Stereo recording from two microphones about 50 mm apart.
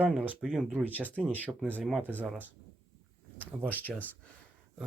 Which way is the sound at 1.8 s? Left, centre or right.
Centre.